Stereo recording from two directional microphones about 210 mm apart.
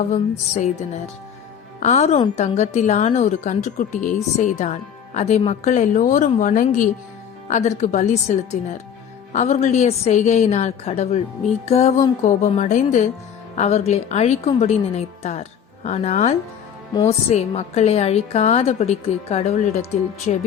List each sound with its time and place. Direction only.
0.1 s a woman's voice: 35° left (ahead or behind)
11.6 s music: 30° left (ahead or behind)
12.2 s a woman's voice: 35° left (ahead or behind)